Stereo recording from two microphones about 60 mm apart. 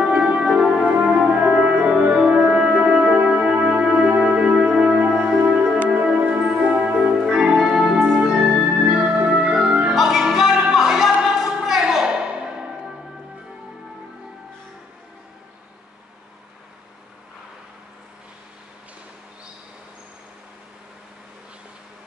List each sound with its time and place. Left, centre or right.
0.1 s music: right
5.9 s church bell: centre
8.3 s music: centre
9.9 s music: centre